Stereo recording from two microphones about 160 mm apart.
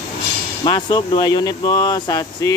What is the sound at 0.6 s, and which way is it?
Speech, 30° left (ahead or behind).